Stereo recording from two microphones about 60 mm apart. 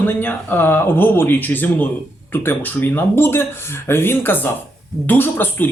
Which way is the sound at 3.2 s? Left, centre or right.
Left.